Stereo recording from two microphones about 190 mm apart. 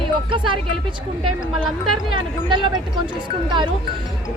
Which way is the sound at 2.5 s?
25° right (ahead or behind).